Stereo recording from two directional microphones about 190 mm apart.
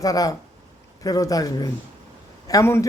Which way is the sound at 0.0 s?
20° left (ahead or behind).